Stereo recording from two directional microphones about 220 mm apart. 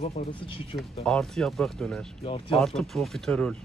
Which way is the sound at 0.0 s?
30° left (ahead or behind).